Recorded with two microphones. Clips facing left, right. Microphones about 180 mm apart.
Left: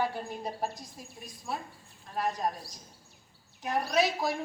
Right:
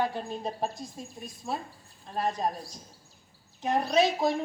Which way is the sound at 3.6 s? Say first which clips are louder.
Right 3 dB; 25° right (ahead or behind).